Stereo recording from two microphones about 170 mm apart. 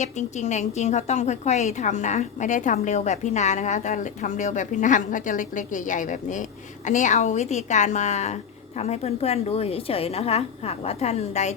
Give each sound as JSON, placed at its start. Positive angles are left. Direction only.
{"t": 0.0, "sound": "a woman's voice", "side_deg": 45}